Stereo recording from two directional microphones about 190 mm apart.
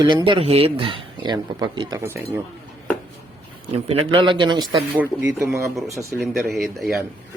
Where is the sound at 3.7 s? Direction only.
30° right (ahead or behind).